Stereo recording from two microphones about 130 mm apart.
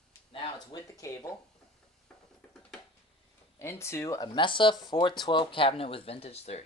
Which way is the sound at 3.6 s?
20° left (ahead or behind).